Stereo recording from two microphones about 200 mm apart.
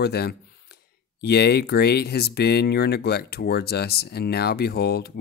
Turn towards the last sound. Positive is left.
turn(degrees=50)  # may be behind; listen again after turning